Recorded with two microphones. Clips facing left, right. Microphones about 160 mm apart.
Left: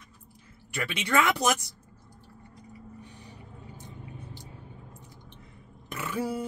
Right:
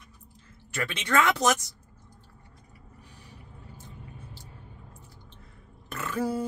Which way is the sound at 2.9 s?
20° left (ahead or behind).